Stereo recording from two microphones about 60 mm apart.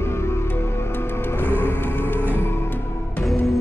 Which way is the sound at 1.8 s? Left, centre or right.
Left.